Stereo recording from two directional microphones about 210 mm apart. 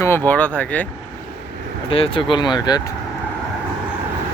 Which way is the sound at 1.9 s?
25° left (ahead or behind).